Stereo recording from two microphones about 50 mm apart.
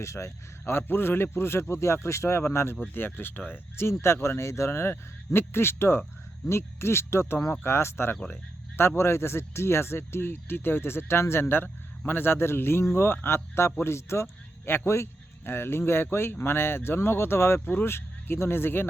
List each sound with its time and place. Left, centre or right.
0.0 s a man's voice: left
0.6 s speech: left
2.9 s speech: left
3.8 s speech: left
4.9 s speech: left
8.3 s a sound: left
9.0 s speech: left